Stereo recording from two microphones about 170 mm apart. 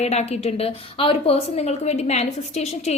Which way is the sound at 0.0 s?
40° left (ahead or behind).